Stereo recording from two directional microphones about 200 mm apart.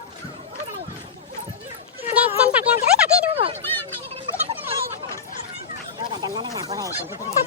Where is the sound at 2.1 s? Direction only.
10° right (ahead or behind).